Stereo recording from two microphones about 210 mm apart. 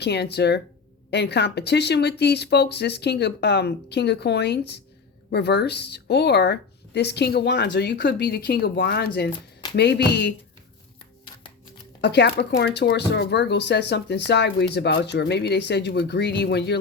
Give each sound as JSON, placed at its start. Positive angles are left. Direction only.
{"t": 0.0, "sound": "speech", "side_deg": 50}
{"t": 12.0, "sound": "speech", "side_deg": 55}